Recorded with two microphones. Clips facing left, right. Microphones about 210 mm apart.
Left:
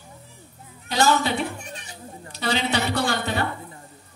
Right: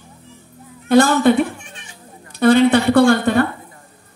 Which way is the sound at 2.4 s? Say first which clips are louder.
Right 13 dB; 55° right (ahead or behind).